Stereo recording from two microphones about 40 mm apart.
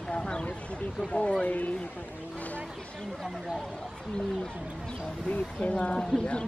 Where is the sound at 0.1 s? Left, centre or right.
Left.